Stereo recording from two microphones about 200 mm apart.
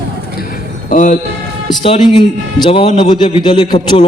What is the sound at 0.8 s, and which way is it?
Speech, 40° left (ahead or behind).